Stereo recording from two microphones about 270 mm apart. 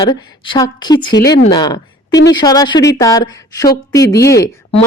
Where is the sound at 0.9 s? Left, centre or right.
Left.